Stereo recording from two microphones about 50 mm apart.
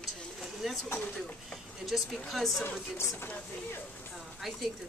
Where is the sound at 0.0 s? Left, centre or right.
Centre.